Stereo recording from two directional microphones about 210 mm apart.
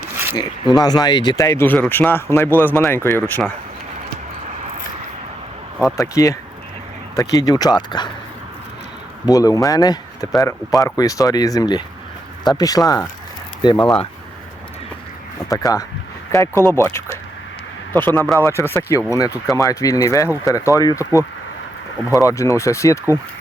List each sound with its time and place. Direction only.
0.3 s speech: 20° left (ahead or behind)
6.0 s speech: 15° left (ahead or behind)
9.2 s speech: 15° left (ahead or behind)
15.4 s speech: 15° left (ahead or behind)
18.3 s speech: 10° left (ahead or behind)
22.1 s speech: 15° left (ahead or behind)